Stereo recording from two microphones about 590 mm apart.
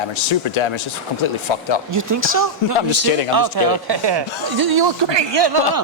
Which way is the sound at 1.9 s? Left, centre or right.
Right.